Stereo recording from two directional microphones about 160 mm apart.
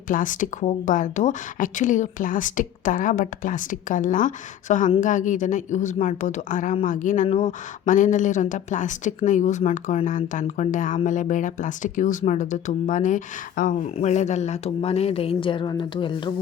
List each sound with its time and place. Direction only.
0.1 s speech: 55° left (ahead or behind); by 16.3 s 30° left (ahead or behind)